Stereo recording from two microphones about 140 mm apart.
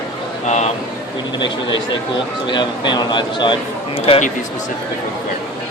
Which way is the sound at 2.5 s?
30° left (ahead or behind).